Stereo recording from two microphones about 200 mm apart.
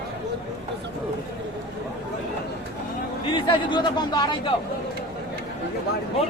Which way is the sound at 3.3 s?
25° left (ahead or behind).